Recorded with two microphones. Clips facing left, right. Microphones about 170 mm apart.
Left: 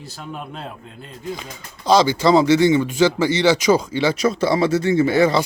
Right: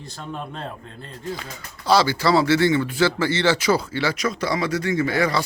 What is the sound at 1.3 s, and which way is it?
A man's voice, 20° left (ahead or behind).